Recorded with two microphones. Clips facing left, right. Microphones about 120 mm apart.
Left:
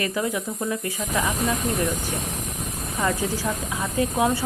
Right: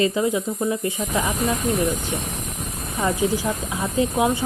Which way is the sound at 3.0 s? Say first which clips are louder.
Right 3 dB; 20° right (ahead or behind).